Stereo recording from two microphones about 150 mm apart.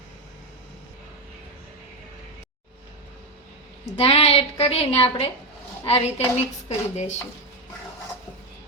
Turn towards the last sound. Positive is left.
turn(degrees=50)  # may be behind; listen again after turning